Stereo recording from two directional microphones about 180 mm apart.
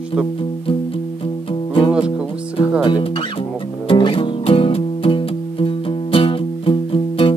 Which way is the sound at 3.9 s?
30° left (ahead or behind).